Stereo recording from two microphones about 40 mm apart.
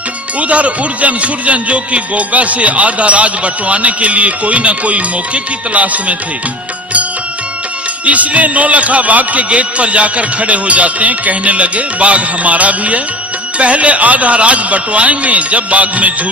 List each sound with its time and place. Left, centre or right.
0.3 s speech: right
8.0 s speech: right